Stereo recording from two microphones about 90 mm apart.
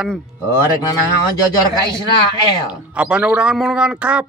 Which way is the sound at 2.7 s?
10° right (ahead or behind).